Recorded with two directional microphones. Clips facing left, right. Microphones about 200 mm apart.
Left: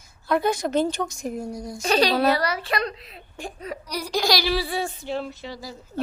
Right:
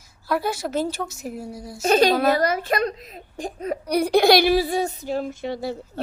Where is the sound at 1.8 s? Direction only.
45° right (ahead or behind).